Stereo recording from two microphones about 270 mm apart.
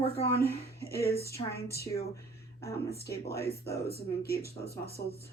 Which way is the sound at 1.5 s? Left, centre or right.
Left.